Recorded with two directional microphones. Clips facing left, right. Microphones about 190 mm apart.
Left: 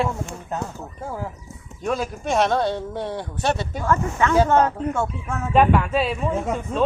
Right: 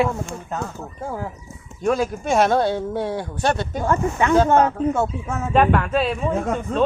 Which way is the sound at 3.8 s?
20° right (ahead or behind).